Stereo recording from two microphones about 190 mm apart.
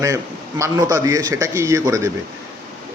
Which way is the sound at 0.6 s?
15° right (ahead or behind).